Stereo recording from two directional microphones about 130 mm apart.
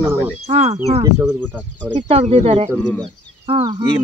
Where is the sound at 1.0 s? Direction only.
25° right (ahead or behind).